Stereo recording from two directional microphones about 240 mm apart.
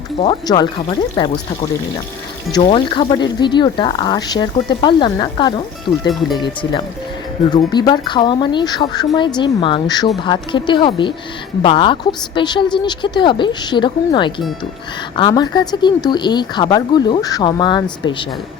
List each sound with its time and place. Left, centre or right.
0.2 s speech: left
2.5 s speech: centre